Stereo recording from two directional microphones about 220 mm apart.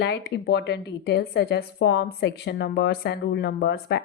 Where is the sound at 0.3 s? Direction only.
50° left (ahead or behind).